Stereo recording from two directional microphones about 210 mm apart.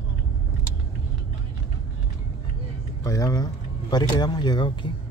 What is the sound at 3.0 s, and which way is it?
Speech, 15° left (ahead or behind).